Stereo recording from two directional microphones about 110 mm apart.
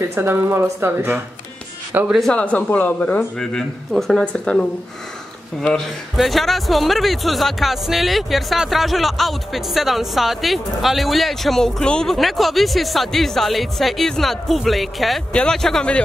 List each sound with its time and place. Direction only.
0.0 s speech: 25° right (ahead or behind)
2.3 s a man's voice: 10° left (ahead or behind)